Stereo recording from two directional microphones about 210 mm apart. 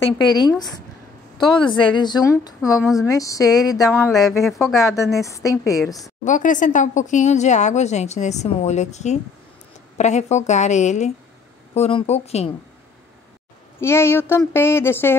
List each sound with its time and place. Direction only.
0.3 s a woman's voice: 20° left (ahead or behind)
2.8 s speech: centre (ahead or behind)
3.1 s speech: 15° left (ahead or behind)
4.1 s speech: centre (ahead or behind)
5.2 s speech: 15° left (ahead or behind)
6.2 s a woman's voice: 35° left (ahead or behind)
13.7 s speech: 10° left (ahead or behind)